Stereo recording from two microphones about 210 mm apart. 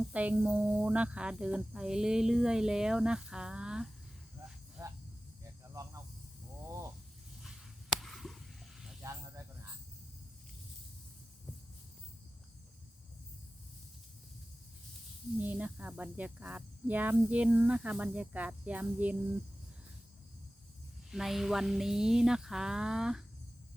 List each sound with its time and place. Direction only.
0.1 s speech: 5° right (ahead or behind)
4.8 s snake: 10° right (ahead or behind)
7.4 s a sound: centre (ahead or behind)
9.0 s speech: 15° right (ahead or behind)
15.4 s speech: 10° right (ahead or behind)
21.1 s speech: centre (ahead or behind)